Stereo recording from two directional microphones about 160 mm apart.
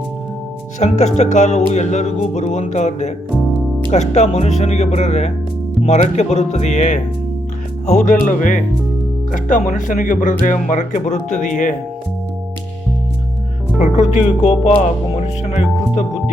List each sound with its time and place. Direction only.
0.8 s speech: 45° left (ahead or behind)
3.3 s music: 5° left (ahead or behind)
3.9 s speech: 45° left (ahead or behind)
13.7 s speech: 45° left (ahead or behind)